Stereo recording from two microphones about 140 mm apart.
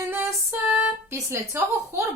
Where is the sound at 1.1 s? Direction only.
20° right (ahead or behind).